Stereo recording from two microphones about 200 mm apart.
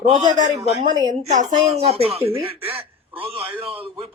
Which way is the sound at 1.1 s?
35° right (ahead or behind).